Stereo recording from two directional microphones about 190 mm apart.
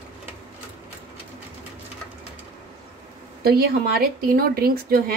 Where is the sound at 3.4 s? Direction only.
55° right (ahead or behind).